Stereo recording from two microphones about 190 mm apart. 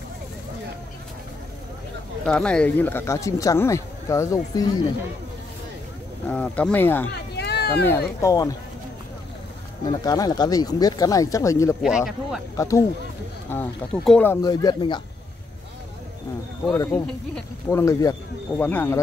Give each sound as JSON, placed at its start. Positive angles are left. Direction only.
{"t": 2.2, "sound": "speech", "side_deg": 5}
{"t": 6.2, "sound": "speech", "side_deg": 5}
{"t": 7.3, "sound": "a sound", "side_deg": 60}
{"t": 7.7, "sound": "speech", "side_deg": 10}
{"t": 10.0, "sound": "speech", "side_deg": 20}
{"t": 11.8, "sound": "speech", "side_deg": -5}
{"t": 12.5, "sound": "speech", "side_deg": 15}
{"t": 14.5, "sound": "speech", "side_deg": 20}
{"t": 16.7, "sound": "speech", "side_deg": 15}